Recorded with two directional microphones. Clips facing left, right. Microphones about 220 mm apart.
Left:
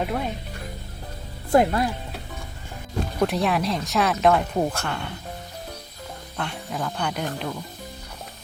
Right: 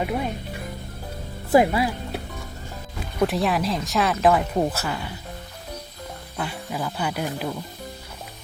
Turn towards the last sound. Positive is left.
turn(degrees=-5)  # may be behind; listen again after turning